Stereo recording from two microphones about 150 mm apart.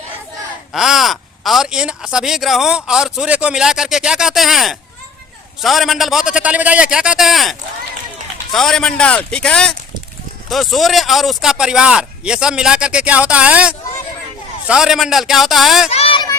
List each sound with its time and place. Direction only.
0.7 s speech: centre (ahead or behind)
8.5 s speech: 5° left (ahead or behind)
15.9 s a sound: 40° left (ahead or behind)